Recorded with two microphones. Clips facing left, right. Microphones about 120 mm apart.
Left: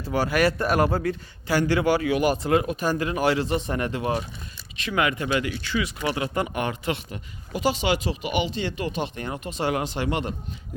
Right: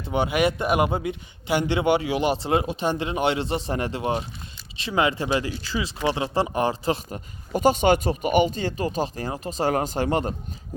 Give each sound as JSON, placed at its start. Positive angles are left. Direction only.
{"t": 0.0, "sound": "a man's voice", "side_deg": -20}